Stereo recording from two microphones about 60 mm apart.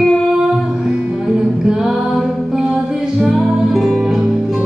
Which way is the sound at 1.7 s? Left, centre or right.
Centre.